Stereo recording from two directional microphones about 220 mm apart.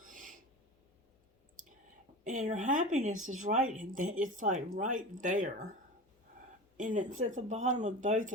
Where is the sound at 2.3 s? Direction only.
35° right (ahead or behind).